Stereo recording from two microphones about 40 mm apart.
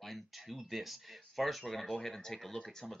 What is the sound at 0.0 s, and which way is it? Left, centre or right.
Speech, centre.